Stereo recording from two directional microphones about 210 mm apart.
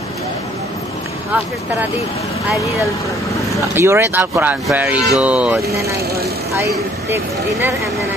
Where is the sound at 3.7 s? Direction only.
15° right (ahead or behind).